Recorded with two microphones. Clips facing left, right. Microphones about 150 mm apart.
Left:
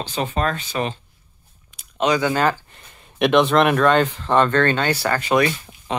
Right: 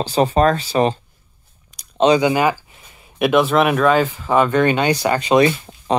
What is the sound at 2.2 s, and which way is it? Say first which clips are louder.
Speech: right 3 dB; 10° right (ahead or behind).